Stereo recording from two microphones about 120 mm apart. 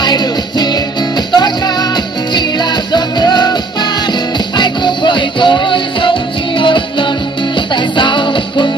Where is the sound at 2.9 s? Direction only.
35° left (ahead or behind).